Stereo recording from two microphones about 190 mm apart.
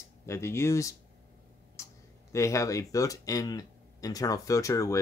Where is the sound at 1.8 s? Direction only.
15° left (ahead or behind).